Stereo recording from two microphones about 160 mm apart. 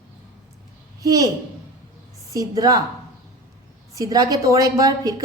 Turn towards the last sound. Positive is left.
turn(degrees=-20)  # may be behind; listen again after turning